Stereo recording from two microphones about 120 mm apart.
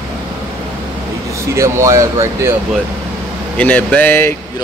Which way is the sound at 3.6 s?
15° left (ahead or behind).